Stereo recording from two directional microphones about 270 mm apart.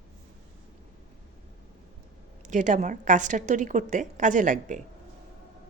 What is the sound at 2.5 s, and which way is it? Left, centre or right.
A woman's voice, right.